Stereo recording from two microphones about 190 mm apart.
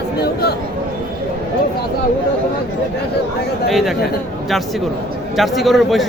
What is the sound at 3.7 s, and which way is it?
Speech, centre (ahead or behind).